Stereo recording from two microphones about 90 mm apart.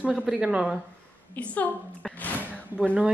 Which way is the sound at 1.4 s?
15° left (ahead or behind).